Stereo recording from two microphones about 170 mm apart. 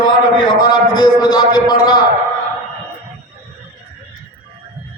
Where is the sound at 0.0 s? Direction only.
25° left (ahead or behind).